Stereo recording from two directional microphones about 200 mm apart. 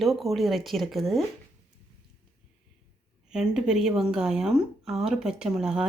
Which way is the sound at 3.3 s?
Centre (ahead or behind).